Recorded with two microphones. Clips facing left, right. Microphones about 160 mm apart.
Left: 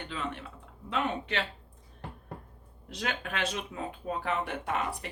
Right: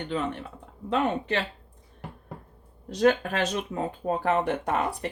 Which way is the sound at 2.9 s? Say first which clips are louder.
Right 13 dB; 40° right (ahead or behind).